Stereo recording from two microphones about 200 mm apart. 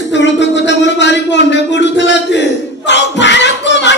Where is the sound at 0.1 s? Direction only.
60° left (ahead or behind).